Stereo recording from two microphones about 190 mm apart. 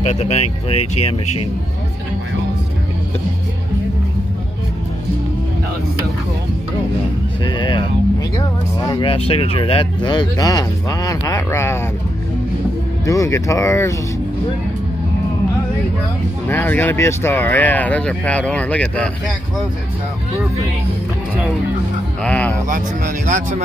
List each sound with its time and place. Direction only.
0.0 s speech: 35° left (ahead or behind)
7.4 s speech: 25° left (ahead or behind)
13.0 s speech: 15° left (ahead or behind)
16.4 s speech: 10° left (ahead or behind)
22.2 s speech: 5° left (ahead or behind)
22.7 s speech: 40° right (ahead or behind)